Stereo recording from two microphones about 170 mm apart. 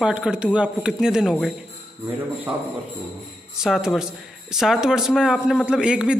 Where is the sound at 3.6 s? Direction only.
5° right (ahead or behind).